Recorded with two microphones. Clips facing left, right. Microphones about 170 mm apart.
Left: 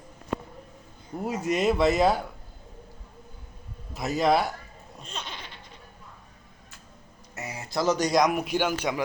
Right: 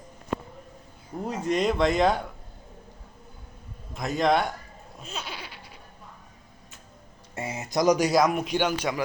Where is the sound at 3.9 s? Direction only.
5° left (ahead or behind).